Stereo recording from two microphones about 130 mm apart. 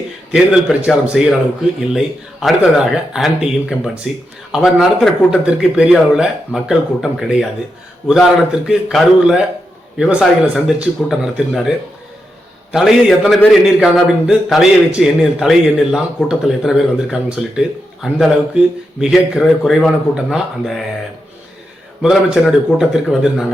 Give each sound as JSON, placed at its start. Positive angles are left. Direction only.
{"t": 0.3, "sound": "a man's voice", "side_deg": -10}
{"t": 12.7, "sound": "a man's voice", "side_deg": 0}
{"t": 22.0, "sound": "a man's voice", "side_deg": 0}